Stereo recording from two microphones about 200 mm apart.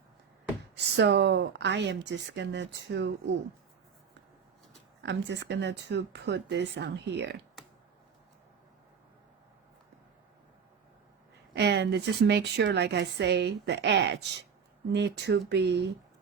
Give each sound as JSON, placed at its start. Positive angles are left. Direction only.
{"t": 0.9, "sound": "a woman's voice", "side_deg": -60}
{"t": 5.0, "sound": "a woman's voice", "side_deg": -60}
{"t": 11.5, "sound": "a woman's voice", "side_deg": -60}